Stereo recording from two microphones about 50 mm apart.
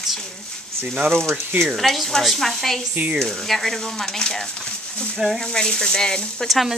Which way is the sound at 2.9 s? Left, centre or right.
Right.